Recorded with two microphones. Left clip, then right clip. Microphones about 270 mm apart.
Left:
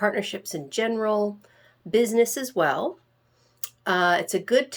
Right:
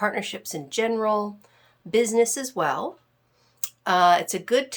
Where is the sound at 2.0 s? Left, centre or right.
Centre.